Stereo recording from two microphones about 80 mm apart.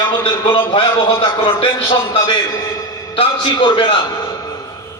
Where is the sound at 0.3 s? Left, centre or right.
Left.